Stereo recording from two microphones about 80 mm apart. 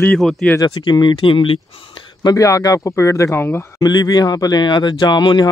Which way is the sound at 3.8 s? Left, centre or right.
Left.